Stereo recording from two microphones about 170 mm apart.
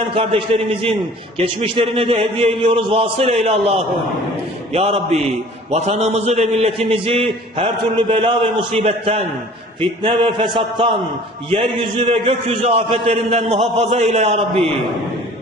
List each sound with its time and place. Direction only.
0.2 s a man's voice: 30° right (ahead or behind)
4.7 s a man's voice: 35° right (ahead or behind)
14.6 s a man's voice: centre (ahead or behind)